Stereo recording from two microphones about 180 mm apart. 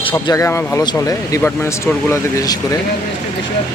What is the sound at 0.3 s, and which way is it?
Speech, 15° left (ahead or behind).